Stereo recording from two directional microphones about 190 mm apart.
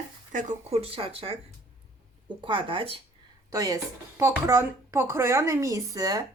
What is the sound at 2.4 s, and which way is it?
Speech, 25° right (ahead or behind).